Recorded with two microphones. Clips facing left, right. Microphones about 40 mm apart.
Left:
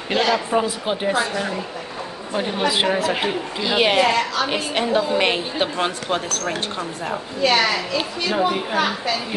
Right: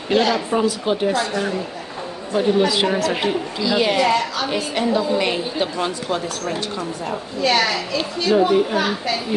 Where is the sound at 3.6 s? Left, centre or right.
Left.